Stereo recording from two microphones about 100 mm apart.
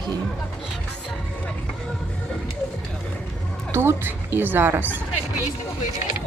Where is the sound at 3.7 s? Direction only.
25° right (ahead or behind).